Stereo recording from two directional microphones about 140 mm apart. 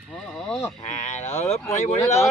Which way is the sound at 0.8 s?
55° left (ahead or behind).